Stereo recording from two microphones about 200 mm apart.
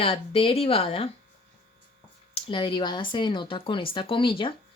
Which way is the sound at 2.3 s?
25° left (ahead or behind).